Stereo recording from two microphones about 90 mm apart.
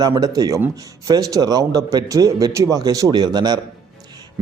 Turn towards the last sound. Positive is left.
turn(degrees=-50)  # may be behind; listen again after turning